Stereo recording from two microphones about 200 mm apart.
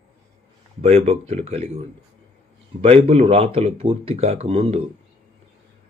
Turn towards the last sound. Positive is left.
turn(degrees=-30)  # may be behind; listen again after turning